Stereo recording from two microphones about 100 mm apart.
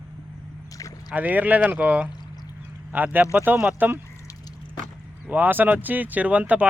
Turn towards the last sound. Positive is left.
turn(degrees=-15)  # may be behind; listen again after turning